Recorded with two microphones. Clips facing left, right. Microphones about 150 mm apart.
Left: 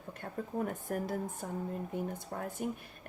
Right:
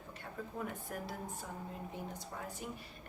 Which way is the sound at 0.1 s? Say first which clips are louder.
Left 7 dB; 50° left (ahead or behind).